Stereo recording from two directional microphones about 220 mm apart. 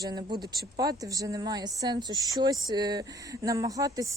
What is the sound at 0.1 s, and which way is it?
Speech, 20° right (ahead or behind).